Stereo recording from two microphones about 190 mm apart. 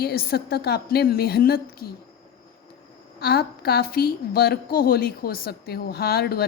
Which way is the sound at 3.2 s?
55° left (ahead or behind).